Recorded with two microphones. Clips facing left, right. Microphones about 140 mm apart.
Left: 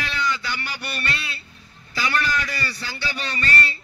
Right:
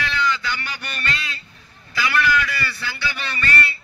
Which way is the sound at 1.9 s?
30° left (ahead or behind).